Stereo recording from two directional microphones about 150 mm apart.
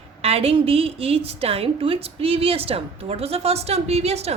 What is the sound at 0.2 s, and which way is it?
A woman's voice, 40° right (ahead or behind).